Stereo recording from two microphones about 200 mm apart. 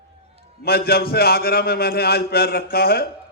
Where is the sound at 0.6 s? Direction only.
50° left (ahead or behind).